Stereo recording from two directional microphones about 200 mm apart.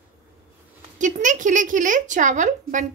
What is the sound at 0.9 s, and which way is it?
Speech, 40° right (ahead or behind).